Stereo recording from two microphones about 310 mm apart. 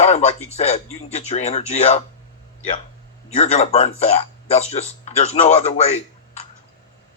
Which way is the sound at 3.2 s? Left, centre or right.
Centre.